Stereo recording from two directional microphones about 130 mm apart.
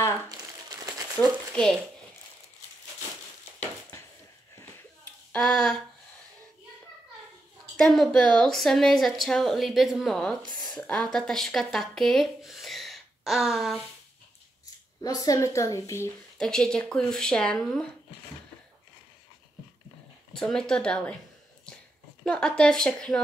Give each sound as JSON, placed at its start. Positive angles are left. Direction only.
{"t": 0.3, "sound": "crumpling", "side_deg": -30}
{"t": 1.5, "sound": "speech", "side_deg": 5}
{"t": 5.3, "sound": "a woman's voice", "side_deg": 5}
{"t": 7.7, "sound": "a woman's voice", "side_deg": 5}
{"t": 15.0, "sound": "a woman's voice", "side_deg": 30}
{"t": 16.3, "sound": "a woman's voice", "side_deg": 5}
{"t": 20.3, "sound": "a woman's voice", "side_deg": 5}
{"t": 22.2, "sound": "a woman's voice", "side_deg": 5}